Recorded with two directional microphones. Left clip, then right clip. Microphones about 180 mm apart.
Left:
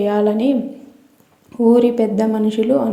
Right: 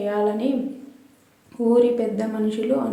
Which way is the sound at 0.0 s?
35° left (ahead or behind).